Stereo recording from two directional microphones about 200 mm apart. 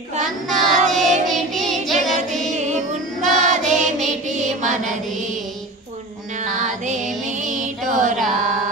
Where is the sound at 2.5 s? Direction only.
35° right (ahead or behind).